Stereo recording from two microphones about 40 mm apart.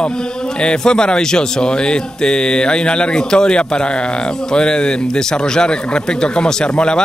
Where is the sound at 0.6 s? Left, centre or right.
Left.